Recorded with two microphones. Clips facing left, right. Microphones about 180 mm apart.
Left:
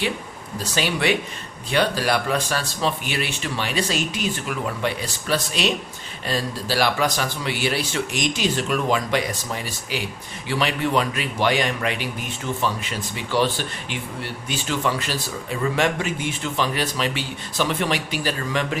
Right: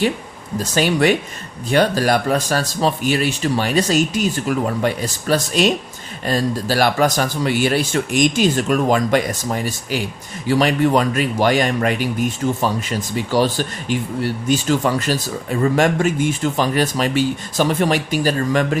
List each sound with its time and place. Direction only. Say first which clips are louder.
0.6 s a man's voice: right 7 dB; 45° right (ahead or behind)